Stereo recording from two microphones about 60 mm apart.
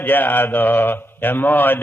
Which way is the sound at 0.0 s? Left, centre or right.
Left.